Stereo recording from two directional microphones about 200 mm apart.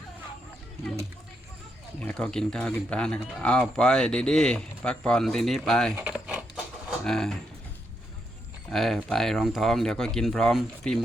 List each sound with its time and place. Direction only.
2.0 s speech: 5° left (ahead or behind)
6.0 s a sound: 5° right (ahead or behind)
7.0 s speech: centre (ahead or behind)
8.7 s speech: centre (ahead or behind)